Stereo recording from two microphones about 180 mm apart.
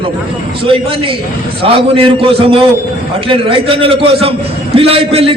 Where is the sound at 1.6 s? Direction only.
30° right (ahead or behind).